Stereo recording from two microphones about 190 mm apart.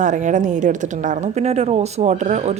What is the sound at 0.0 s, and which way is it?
A woman's voice, 40° right (ahead or behind).